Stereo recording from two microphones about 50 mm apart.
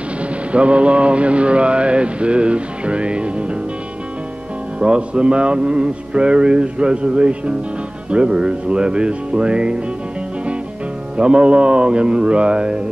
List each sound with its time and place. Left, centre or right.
0.2 s music: right
4.7 s music: centre
11.1 s music: centre